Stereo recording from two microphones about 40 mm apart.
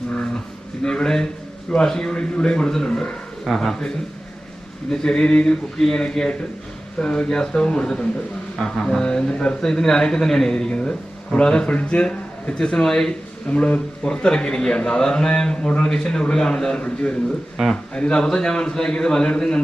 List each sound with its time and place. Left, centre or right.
0.8 s speech: centre
3.4 s speech: centre
4.9 s a man's voice: centre
12.8 s speech: centre
13.5 s speech: left
14.1 s speech: centre
17.6 s speech: centre
17.9 s speech: left
18.3 s speech: centre